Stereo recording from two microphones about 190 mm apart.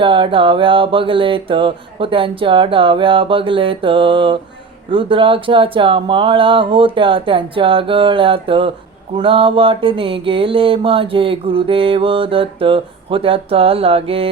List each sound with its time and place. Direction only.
0.0 s mantra: 25° right (ahead or behind)